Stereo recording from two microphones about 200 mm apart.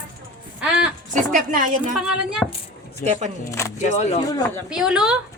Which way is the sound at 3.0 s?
35° right (ahead or behind).